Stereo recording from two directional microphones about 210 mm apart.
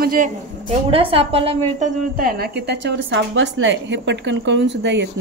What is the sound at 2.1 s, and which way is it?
A woman's voice, 45° right (ahead or behind).